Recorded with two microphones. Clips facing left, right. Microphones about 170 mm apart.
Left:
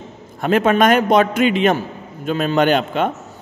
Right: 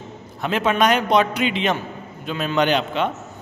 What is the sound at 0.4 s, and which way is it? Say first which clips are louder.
A man's voice: left 5 dB; 50° left (ahead or behind).